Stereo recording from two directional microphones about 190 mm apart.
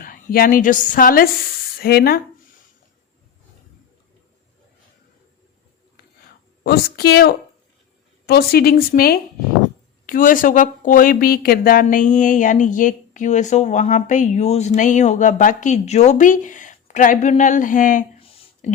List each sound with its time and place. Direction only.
0.0 s a woman's voice: 50° left (ahead or behind)
6.7 s a woman's voice: 60° left (ahead or behind); by 18.8 s 40° left (ahead or behind)